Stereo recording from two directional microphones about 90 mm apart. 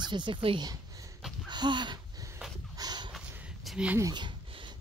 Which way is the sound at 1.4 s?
55° right (ahead or behind).